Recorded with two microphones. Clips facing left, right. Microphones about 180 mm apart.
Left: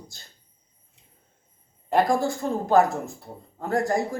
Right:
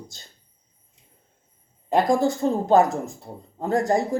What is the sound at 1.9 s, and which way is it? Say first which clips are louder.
Speech: right 2 dB; 20° right (ahead or behind).